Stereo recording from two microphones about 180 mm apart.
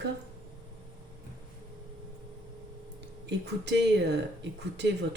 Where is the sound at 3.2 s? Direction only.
70° right (ahead or behind).